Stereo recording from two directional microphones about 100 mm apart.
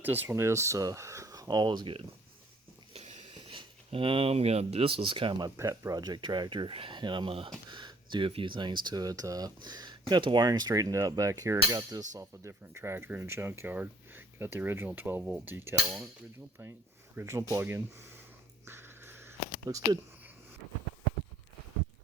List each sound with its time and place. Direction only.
0.0 s speech: 20° right (ahead or behind); by 2.0 s 50° right (ahead or behind)
2.9 s a sound: 90° right; by 5.4 s 60° right (ahead or behind)
5.5 s speech: 30° right (ahead or behind); by 7.5 s 65° right (ahead or behind)
7.7 s a sound: 50° right (ahead or behind)
8.3 s speech: 55° right (ahead or behind); by 15.7 s 20° right (ahead or behind)
17.2 s speech: 25° right (ahead or behind)
18.6 s dog: 25° right (ahead or behind)
19.6 s speech: 35° right (ahead or behind)